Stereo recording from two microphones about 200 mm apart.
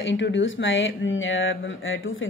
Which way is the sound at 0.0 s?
65° left (ahead or behind).